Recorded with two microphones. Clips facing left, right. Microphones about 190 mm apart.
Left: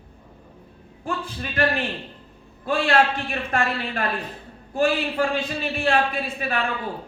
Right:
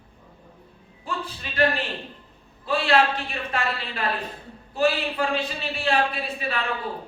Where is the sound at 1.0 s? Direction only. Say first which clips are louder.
Left 3 dB; 50° left (ahead or behind).